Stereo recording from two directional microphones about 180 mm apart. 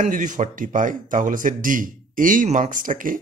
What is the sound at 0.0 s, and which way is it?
Speech, 45° right (ahead or behind).